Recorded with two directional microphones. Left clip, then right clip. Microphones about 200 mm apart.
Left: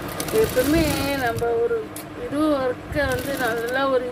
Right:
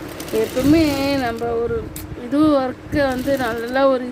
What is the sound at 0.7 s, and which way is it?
Speech, 40° right (ahead or behind).